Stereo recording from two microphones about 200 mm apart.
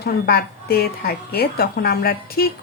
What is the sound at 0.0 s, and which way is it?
A woman's voice, 50° left (ahead or behind).